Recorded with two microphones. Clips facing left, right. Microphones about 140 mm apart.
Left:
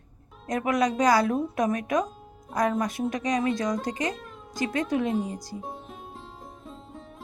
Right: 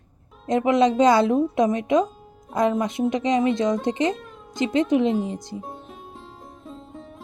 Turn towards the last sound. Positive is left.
turn(degrees=0)  # may be behind; listen again after turning